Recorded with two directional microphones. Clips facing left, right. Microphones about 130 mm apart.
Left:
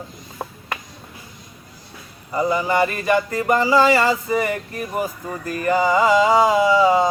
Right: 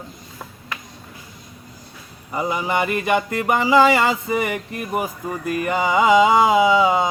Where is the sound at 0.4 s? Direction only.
45° left (ahead or behind).